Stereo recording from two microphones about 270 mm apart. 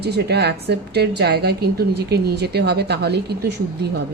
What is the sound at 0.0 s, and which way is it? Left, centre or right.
A woman's voice, right.